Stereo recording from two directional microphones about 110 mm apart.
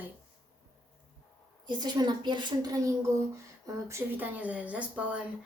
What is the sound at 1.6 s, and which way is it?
Speech, 40° right (ahead or behind).